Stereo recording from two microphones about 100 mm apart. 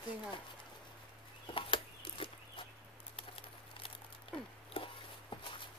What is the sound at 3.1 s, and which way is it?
Patter, 60° left (ahead or behind).